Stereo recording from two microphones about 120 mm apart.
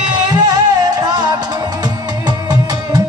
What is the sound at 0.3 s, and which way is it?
Music, 35° right (ahead or behind).